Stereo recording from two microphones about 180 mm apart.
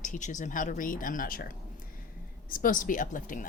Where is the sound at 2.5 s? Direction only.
50° left (ahead or behind).